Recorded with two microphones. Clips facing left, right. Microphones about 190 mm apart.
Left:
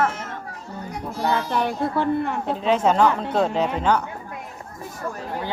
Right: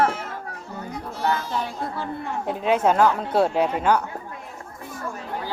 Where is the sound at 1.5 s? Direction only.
65° left (ahead or behind).